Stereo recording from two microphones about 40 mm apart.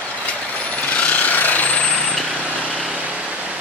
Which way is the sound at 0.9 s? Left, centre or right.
Left.